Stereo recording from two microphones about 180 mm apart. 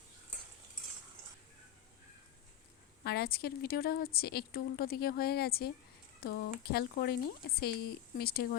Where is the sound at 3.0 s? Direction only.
60° left (ahead or behind).